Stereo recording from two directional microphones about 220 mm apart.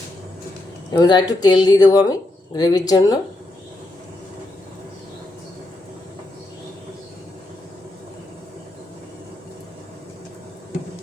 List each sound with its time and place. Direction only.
0.9 s speech: 20° left (ahead or behind)